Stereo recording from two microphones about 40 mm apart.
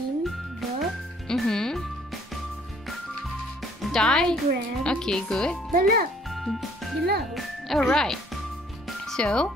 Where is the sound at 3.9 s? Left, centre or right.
Centre.